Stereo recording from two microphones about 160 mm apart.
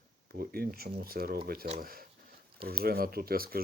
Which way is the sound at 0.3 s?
70° right (ahead or behind).